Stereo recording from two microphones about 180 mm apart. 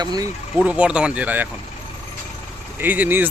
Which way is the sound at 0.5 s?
5° right (ahead or behind).